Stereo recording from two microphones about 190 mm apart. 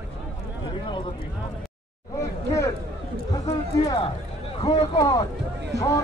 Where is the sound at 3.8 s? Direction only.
25° left (ahead or behind).